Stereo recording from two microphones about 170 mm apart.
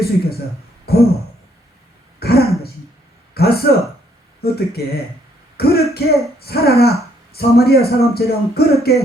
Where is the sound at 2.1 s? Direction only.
65° left (ahead or behind).